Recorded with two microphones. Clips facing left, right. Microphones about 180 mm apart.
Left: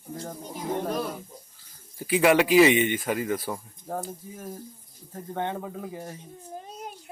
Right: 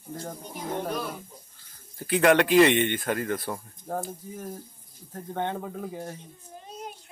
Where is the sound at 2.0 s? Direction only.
5° left (ahead or behind).